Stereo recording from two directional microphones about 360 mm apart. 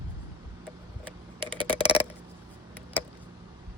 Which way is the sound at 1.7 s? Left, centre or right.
Centre.